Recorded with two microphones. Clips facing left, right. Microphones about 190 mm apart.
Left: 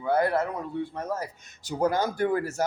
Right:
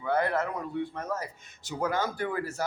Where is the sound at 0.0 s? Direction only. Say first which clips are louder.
Left 3 dB; 35° left (ahead or behind).